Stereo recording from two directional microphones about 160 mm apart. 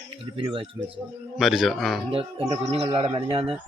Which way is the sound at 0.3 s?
30° right (ahead or behind).